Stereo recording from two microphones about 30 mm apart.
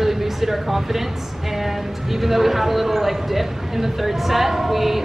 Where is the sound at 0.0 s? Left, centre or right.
Centre.